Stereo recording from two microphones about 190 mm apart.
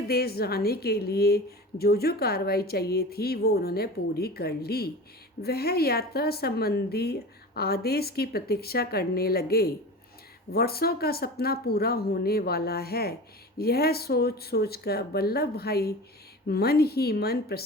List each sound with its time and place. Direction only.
0.1 s a woman's voice: 55° left (ahead or behind)